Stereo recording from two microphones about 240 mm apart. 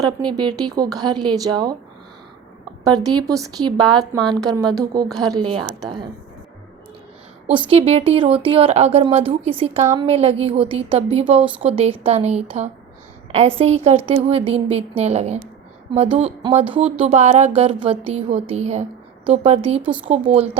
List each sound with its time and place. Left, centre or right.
0.0 s a woman's voice: centre
2.8 s a woman's voice: centre
7.7 s speech: right
19.8 s speech: centre
20.1 s speech: right